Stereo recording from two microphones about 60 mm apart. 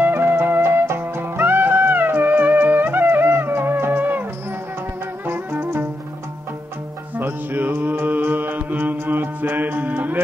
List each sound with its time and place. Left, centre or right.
0.0 s music: right
5.2 s music: right
7.2 s music: right